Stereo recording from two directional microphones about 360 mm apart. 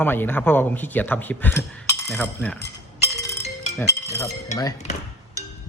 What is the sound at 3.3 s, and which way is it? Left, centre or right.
Music, centre.